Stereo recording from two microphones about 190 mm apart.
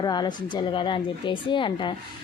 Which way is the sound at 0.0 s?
20° left (ahead or behind).